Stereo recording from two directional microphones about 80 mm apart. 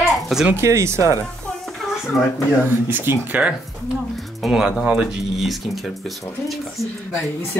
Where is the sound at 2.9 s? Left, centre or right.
Right.